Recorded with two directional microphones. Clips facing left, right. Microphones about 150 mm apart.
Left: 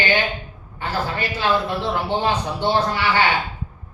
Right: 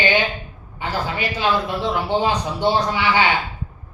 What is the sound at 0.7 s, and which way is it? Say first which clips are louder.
Speech: even; 15° right (ahead or behind).